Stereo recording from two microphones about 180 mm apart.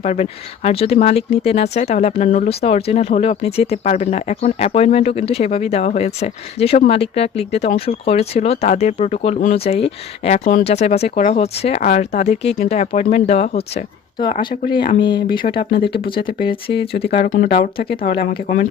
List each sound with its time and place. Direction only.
0.0 s speech: 35° left (ahead or behind)
15.7 s speech: 60° left (ahead or behind)
16.0 s speech: 30° left (ahead or behind)
17.2 s speech: 50° left (ahead or behind)
17.6 s speech: 30° left (ahead or behind)
18.0 s speech: 55° left (ahead or behind)